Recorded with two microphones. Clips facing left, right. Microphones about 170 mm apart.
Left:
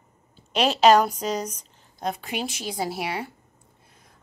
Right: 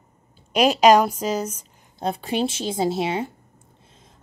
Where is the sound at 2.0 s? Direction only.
30° right (ahead or behind).